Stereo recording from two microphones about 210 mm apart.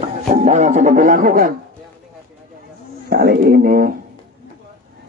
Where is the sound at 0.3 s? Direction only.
35° right (ahead or behind).